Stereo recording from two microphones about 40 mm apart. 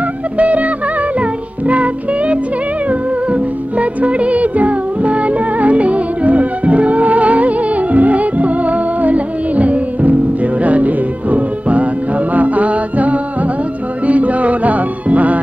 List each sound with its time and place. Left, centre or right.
0.4 s music: right